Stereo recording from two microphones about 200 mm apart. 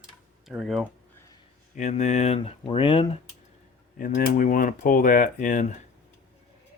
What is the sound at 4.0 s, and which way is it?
Speech, 40° left (ahead or behind).